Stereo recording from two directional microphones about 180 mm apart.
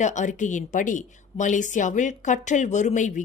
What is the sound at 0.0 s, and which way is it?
A woman's voice, 40° left (ahead or behind).